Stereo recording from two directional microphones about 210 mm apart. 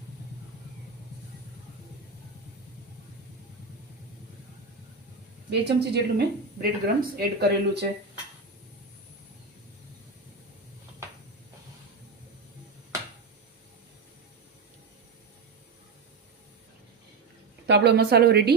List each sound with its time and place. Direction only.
5.5 s speech: 55° right (ahead or behind)
17.7 s speech: 55° right (ahead or behind)